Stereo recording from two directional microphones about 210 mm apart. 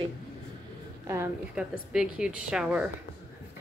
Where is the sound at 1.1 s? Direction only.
10° right (ahead or behind).